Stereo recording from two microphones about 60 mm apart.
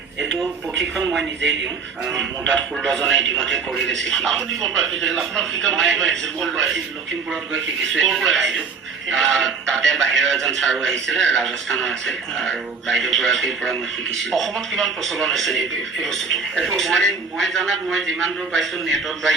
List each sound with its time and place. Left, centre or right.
2.4 s speech: centre
7.5 s a man's voice: centre